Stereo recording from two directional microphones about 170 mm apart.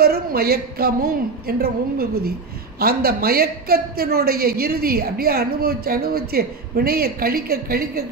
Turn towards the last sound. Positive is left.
turn(degrees=-65)  # may be behind; listen again after turning